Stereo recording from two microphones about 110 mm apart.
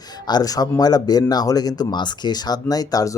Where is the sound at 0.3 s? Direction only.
35° left (ahead or behind).